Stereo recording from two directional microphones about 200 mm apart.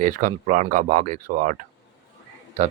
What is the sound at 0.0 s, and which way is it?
Speech, 40° right (ahead or behind).